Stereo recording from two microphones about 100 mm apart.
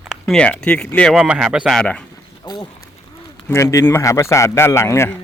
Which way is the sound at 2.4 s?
45° left (ahead or behind).